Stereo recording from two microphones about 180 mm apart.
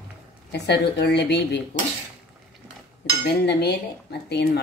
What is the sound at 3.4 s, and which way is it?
Speech, 65° left (ahead or behind).